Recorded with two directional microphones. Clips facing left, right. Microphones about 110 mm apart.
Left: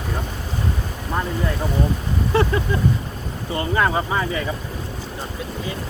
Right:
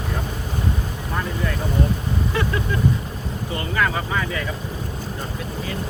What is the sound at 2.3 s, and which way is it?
Vehicle, 30° left (ahead or behind).